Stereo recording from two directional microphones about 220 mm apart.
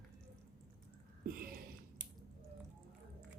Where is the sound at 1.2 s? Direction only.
45° right (ahead or behind).